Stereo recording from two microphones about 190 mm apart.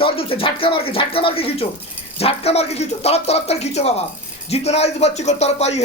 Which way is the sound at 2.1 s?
30° left (ahead or behind).